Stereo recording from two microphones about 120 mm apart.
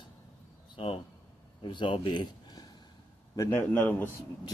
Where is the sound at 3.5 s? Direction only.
15° left (ahead or behind).